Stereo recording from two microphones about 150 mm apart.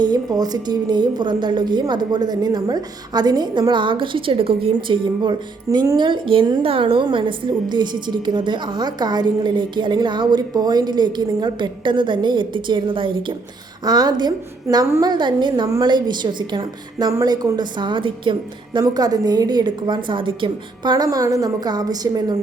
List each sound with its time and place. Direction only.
0.0 s a woman's voice: 25° right (ahead or behind)